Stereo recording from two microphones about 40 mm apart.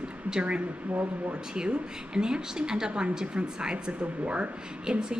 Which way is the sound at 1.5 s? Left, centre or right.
Right.